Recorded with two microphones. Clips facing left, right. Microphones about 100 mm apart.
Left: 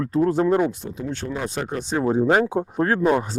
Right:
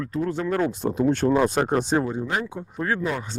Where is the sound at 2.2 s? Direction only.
85° left.